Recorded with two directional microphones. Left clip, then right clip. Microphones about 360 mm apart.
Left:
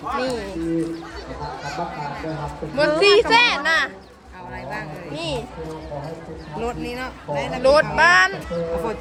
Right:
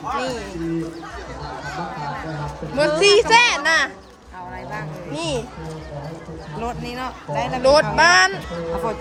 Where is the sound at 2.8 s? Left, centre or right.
Centre.